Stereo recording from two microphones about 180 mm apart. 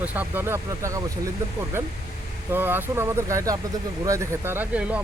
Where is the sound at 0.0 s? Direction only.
10° right (ahead or behind).